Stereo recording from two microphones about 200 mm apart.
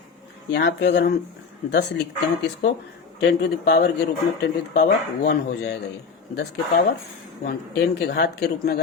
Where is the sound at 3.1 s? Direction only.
55° left (ahead or behind).